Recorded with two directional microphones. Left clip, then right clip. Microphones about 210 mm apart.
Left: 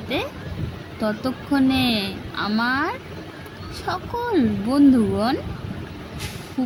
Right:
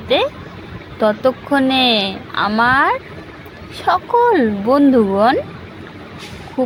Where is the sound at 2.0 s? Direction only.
5° right (ahead or behind).